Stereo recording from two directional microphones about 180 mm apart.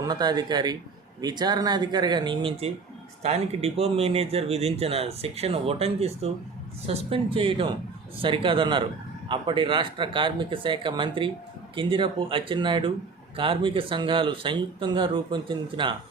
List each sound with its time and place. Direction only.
0.0 s speech: 25° right (ahead or behind)